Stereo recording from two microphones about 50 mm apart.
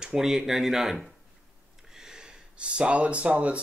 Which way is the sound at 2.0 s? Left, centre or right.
Centre.